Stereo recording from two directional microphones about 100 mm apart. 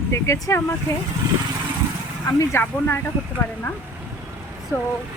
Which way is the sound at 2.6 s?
25° left (ahead or behind).